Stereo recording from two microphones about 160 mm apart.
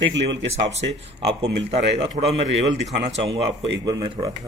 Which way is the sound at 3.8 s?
30° right (ahead or behind).